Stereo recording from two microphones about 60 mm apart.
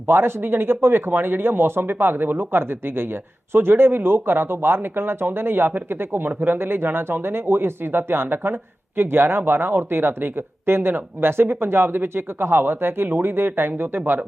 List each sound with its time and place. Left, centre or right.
0.1 s speech: right